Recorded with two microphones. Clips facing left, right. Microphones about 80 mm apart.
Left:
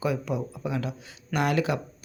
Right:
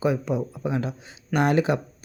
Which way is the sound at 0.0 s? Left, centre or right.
Right.